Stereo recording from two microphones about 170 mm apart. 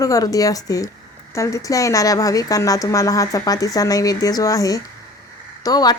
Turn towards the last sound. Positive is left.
turn(degrees=20)  # may be behind; listen again after turning